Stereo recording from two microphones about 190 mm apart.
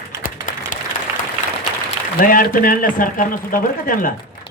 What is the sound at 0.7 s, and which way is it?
Applause, 45° left (ahead or behind).